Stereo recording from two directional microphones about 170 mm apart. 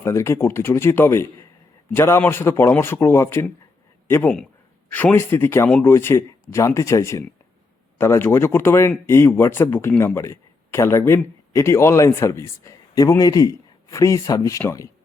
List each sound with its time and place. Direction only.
0.0 s speech: 15° left (ahead or behind)
4.9 s speech: 10° left (ahead or behind)